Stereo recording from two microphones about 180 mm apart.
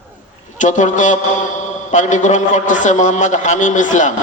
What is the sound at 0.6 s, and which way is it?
A man's voice, 45° left (ahead or behind).